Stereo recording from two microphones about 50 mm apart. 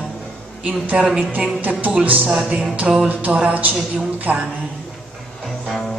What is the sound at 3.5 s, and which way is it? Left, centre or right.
Speech, right.